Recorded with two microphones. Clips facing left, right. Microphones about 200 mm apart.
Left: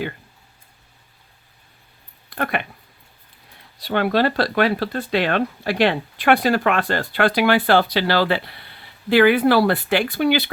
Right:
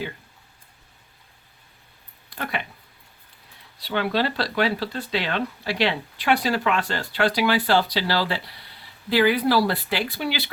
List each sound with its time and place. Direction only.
2.3 s speech: 55° left (ahead or behind)
3.8 s speech: 55° left (ahead or behind)